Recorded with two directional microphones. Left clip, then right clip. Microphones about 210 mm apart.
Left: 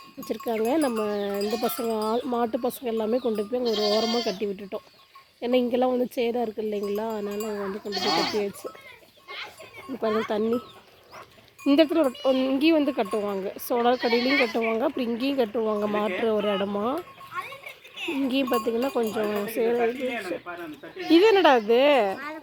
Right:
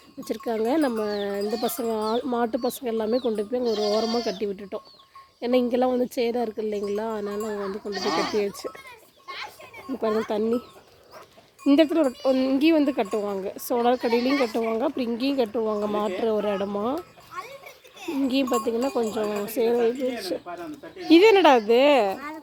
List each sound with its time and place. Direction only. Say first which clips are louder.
0.3 s speech: right 1 dB; centre (ahead or behind)
3.6 s speech: even; 15° left (ahead or behind)
4.4 s speech: right 1 dB; centre (ahead or behind)
7.9 s speech: left 1 dB; 35° left (ahead or behind)
8.6 s a child's voice: right 3 dB; 25° right (ahead or behind)
9.2 s children playing: right 2 dB; 35° right (ahead or behind)
10.2 s speech: right 1 dB; 5° right (ahead or behind)
11.6 s speech: right 1 dB; centre (ahead or behind)
17.3 s music: left 2 dB; 40° right (ahead or behind)
17.9 s a sound: left 2 dB; 30° right (ahead or behind)
18.3 s speech: right 1 dB; centre (ahead or behind)
20.5 s speech: right 1 dB; 25° left (ahead or behind)
21.1 s a woman's voice: right 2 dB; 15° right (ahead or behind)